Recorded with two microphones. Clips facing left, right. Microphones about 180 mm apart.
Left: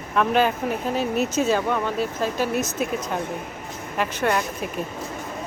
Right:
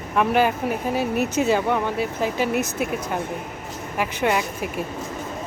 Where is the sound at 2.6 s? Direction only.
60° right (ahead or behind).